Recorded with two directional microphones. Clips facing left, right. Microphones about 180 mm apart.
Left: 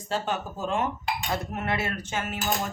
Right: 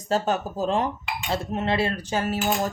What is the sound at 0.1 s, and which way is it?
Speech, 40° right (ahead or behind).